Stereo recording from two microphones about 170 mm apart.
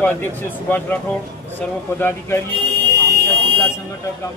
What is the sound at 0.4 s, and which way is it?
Speech, 10° left (ahead or behind).